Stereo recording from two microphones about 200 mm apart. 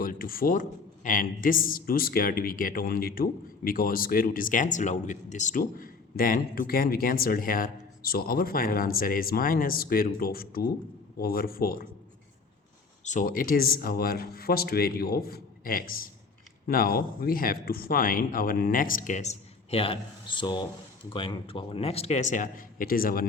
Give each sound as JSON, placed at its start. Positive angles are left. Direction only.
{"t": 0.0, "sound": "a man's voice", "side_deg": 45}
{"t": 13.1, "sound": "a man's voice", "side_deg": 40}